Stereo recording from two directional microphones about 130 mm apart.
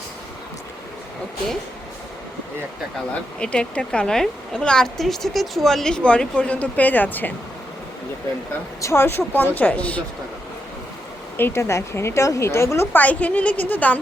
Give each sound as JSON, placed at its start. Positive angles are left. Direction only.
{"t": 3.4, "sound": "a woman's voice", "side_deg": 10}
{"t": 8.8, "sound": "a woman's voice", "side_deg": 20}
{"t": 11.3, "sound": "a woman's voice", "side_deg": 20}